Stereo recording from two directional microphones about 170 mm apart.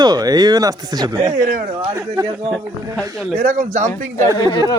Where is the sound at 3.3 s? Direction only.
40° right (ahead or behind).